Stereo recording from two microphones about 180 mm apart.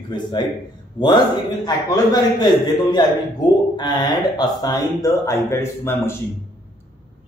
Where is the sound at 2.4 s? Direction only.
25° left (ahead or behind).